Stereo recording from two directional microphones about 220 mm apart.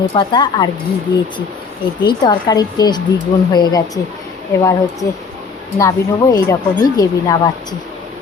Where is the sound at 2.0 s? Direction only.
20° left (ahead or behind).